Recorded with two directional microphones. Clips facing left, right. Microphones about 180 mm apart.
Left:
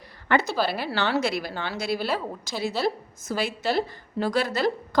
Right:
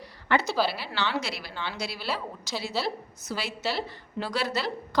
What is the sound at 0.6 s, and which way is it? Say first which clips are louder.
A woman's voice: left 3 dB; 50° left (ahead or behind).